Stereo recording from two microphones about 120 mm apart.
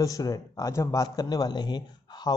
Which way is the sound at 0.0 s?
30° left (ahead or behind).